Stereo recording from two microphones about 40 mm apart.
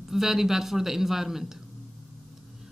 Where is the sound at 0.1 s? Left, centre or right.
Centre.